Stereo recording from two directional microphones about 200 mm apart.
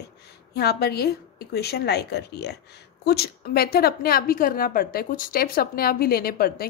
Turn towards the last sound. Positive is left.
turn(degrees=50)  # may be behind; listen again after turning